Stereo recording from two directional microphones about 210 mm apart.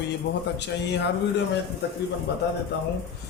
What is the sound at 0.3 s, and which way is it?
Speech, 50° left (ahead or behind).